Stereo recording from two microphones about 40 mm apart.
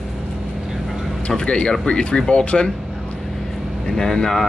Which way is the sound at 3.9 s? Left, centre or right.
Centre.